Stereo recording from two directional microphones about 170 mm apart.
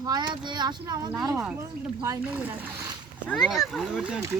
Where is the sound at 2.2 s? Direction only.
10° right (ahead or behind).